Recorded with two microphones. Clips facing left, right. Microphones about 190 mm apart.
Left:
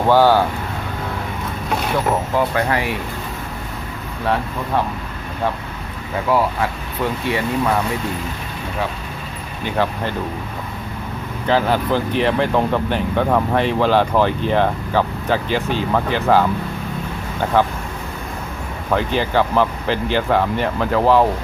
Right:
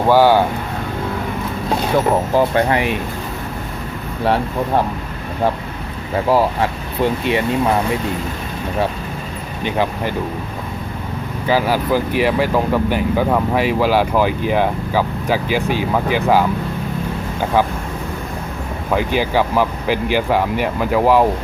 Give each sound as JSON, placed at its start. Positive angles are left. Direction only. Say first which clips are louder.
{"t": 0.1, "sound": "speech", "louder": "right 1 dB", "side_deg": -10}
{"t": 2.3, "sound": "speech", "louder": "right 5 dB", "side_deg": -25}
{"t": 6.2, "sound": "speech", "louder": "right 2 dB", "side_deg": -30}
{"t": 9.6, "sound": "speech", "louder": "right 1 dB", "side_deg": -15}
{"t": 11.4, "sound": "speech", "louder": "right 1 dB", "side_deg": -5}
{"t": 18.9, "sound": "speech", "louder": "right 1 dB", "side_deg": -10}